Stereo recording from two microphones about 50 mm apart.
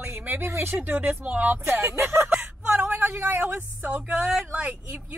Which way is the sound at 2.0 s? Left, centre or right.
Right.